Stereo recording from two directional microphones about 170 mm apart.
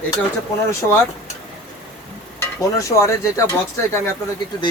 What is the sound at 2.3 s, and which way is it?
Stir, 20° left (ahead or behind).